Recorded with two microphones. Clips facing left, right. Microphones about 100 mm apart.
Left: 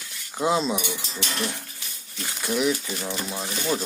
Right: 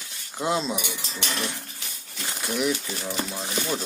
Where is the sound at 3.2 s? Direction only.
20° left (ahead or behind).